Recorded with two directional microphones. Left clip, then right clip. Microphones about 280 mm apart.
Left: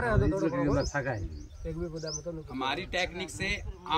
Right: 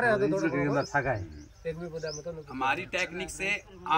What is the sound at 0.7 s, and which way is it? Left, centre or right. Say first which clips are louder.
Speech: right 3 dB; centre.